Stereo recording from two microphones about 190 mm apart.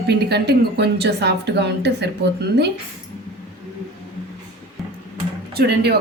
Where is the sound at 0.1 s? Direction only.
60° right (ahead or behind).